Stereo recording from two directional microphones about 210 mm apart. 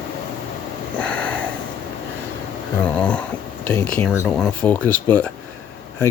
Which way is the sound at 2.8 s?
5° left (ahead or behind).